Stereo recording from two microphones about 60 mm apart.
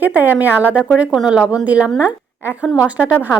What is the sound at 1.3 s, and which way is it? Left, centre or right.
Speech, centre.